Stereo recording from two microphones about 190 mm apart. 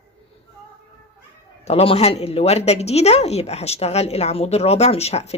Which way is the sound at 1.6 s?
35° left (ahead or behind).